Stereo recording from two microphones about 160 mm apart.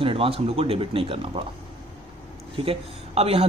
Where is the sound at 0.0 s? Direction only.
35° right (ahead or behind).